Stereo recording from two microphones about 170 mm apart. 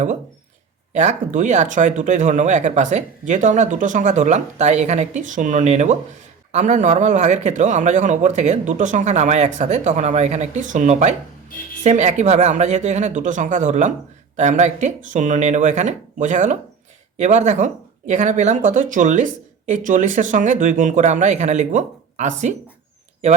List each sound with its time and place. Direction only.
0.9 s speech: 45° right (ahead or behind)